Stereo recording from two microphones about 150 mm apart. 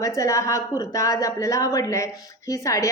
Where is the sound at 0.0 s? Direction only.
20° left (ahead or behind).